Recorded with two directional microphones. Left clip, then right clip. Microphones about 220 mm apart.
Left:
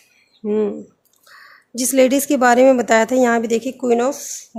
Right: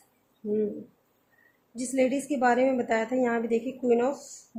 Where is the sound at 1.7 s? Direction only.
50° left (ahead or behind).